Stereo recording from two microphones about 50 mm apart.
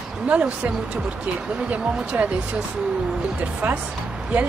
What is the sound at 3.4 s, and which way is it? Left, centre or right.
Speech, right.